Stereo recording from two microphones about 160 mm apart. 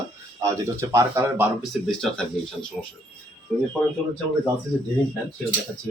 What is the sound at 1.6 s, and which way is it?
Speech, centre (ahead or behind).